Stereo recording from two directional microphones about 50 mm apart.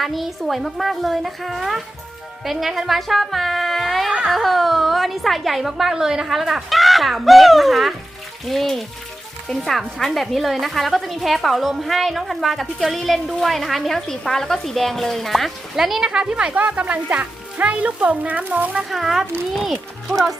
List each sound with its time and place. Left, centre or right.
0.0 s a woman's voice: centre
15.7 s speech: centre; by 18.8 s right
18.9 s a woman's voice: centre